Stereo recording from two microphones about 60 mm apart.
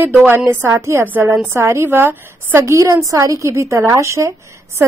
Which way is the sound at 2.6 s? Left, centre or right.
Right.